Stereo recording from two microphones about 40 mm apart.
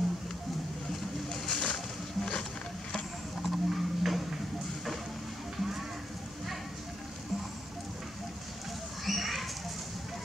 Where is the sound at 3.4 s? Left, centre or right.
Centre.